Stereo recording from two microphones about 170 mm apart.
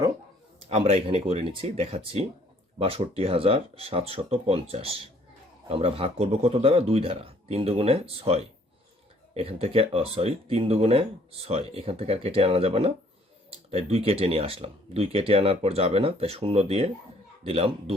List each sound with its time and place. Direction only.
0.7 s speech: 35° right (ahead or behind)